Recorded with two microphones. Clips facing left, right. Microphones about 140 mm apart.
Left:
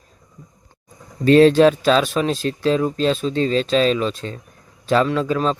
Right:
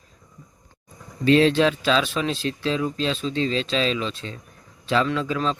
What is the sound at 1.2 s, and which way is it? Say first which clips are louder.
Speech: left 6 dB; 45° left (ahead or behind).